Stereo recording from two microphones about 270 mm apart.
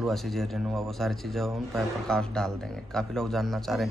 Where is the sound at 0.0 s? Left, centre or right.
Centre.